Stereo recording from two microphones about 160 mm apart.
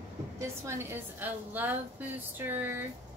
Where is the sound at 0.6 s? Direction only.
15° right (ahead or behind).